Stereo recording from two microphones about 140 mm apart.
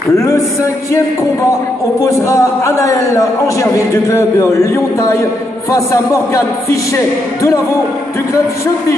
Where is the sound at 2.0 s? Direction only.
20° left (ahead or behind).